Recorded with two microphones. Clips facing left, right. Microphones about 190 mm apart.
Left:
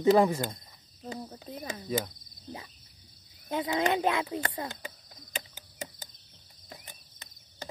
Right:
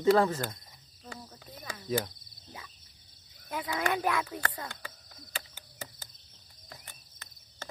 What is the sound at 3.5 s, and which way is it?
Speech, 25° left (ahead or behind).